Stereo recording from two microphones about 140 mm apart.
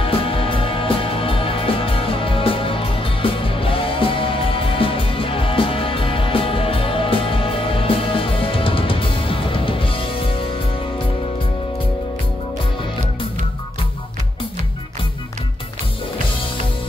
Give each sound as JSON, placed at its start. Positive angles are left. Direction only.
{"t": 0.0, "sound": "music", "side_deg": 40}